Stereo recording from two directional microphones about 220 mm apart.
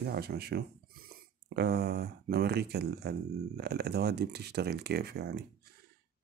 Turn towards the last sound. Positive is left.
turn(degrees=-45)  # may be behind; listen again after turning